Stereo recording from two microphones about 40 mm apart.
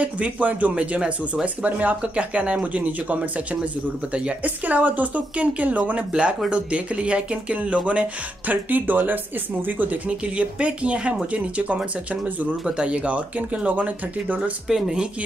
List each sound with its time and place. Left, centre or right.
0.0 s speech: right
0.7 s speech: right
4.6 s speech: right
8.5 s speech: right
10.0 s speech: right
12.6 s speech: right
14.7 s speech: centre